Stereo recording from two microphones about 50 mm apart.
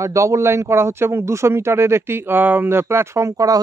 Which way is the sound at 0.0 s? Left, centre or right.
Right.